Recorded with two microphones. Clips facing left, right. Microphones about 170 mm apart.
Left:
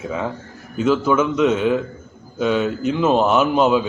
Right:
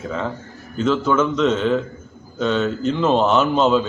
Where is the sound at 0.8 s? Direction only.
5° left (ahead or behind).